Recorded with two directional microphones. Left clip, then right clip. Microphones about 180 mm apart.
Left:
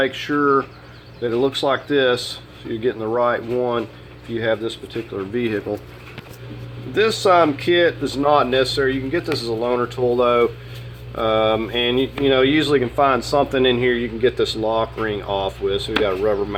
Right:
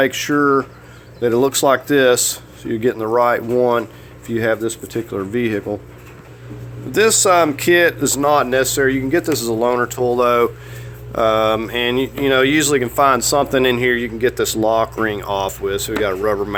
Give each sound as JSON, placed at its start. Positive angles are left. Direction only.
{"t": 0.0, "sound": "speech", "side_deg": -45}
{"t": 1.2, "sound": "speech", "side_deg": -60}
{"t": 3.1, "sound": "speech", "side_deg": -55}
{"t": 4.4, "sound": "speech", "side_deg": -70}
{"t": 5.1, "sound": "speech", "side_deg": -45}
{"t": 6.9, "sound": "speech", "side_deg": -60}